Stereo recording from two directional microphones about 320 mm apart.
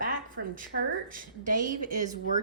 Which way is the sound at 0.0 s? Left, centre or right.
Right.